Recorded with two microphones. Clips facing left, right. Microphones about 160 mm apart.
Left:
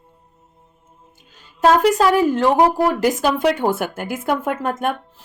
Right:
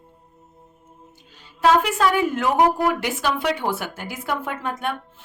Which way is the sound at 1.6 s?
40° left (ahead or behind).